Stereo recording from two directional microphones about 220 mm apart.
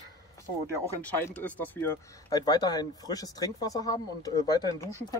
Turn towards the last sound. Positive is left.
turn(degrees=15)  # may be behind; listen again after turning